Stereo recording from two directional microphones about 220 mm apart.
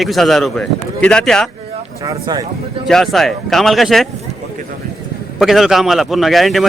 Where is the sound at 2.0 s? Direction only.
15° right (ahead or behind).